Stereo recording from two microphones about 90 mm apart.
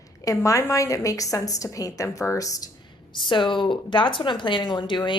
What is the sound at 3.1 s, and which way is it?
A woman's voice, 60° left (ahead or behind).